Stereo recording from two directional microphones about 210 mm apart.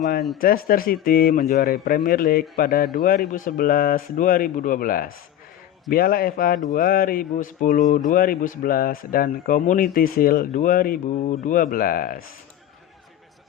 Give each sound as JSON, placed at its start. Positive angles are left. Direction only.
{"t": 0.3, "sound": "speech", "side_deg": 45}
{"t": 6.7, "sound": "mantra", "side_deg": 45}
{"t": 7.9, "sound": "speech", "side_deg": 40}